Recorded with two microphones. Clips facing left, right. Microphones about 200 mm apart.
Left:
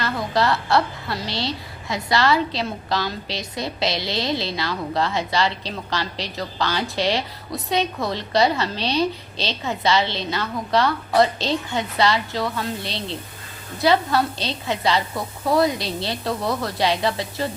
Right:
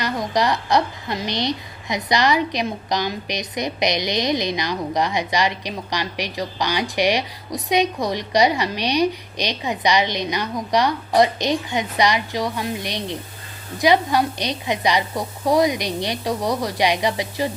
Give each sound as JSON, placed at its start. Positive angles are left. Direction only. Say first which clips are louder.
{"t": 0.0, "sound": "a woman's voice", "louder": "right 1 dB", "side_deg": -15}